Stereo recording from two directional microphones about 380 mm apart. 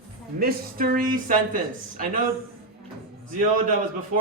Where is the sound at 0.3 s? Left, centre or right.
Right.